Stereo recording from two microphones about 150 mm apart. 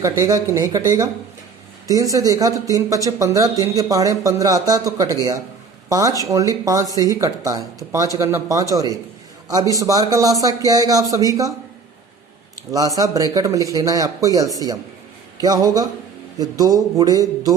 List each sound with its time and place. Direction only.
0.0 s speech: 20° right (ahead or behind)
12.7 s speech: 25° right (ahead or behind)